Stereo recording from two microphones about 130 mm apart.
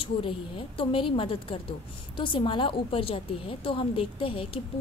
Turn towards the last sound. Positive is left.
turn(degrees=40)  # may be behind; listen again after turning